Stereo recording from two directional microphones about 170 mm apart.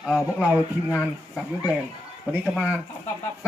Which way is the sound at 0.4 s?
10° right (ahead or behind).